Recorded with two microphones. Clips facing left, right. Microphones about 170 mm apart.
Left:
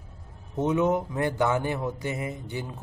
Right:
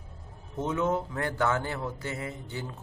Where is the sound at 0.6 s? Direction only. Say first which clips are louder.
Left 4 dB; 20° left (ahead or behind).